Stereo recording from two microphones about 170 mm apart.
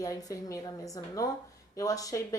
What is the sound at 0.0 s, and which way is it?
A woman's voice, 20° left (ahead or behind).